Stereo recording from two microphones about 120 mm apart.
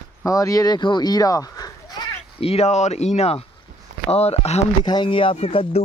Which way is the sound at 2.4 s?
60° left (ahead or behind).